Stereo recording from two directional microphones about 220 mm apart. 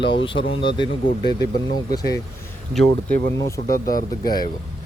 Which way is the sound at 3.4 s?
15° left (ahead or behind).